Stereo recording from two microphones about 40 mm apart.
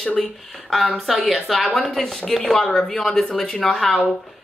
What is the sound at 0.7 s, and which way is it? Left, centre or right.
A woman's voice, centre.